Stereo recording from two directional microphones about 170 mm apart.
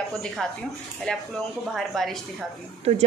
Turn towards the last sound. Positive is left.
turn(degrees=-40)  # may be behind; listen again after turning